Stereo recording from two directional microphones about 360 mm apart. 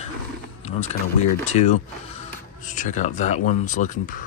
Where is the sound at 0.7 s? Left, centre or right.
Centre.